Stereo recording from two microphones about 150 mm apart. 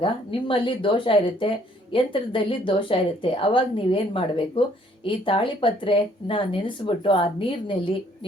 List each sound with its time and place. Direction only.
0.0 s speech: 35° left (ahead or behind)